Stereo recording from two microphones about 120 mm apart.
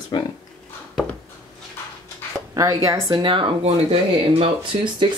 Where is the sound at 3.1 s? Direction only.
45° right (ahead or behind).